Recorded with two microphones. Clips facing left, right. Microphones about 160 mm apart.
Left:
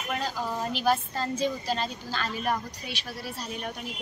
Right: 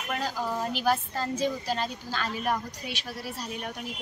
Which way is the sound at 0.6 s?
10° right (ahead or behind).